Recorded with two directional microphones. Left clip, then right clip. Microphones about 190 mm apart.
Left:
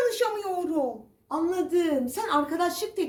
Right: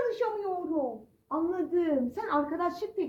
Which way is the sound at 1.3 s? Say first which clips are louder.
Left 4 dB; 10° left (ahead or behind).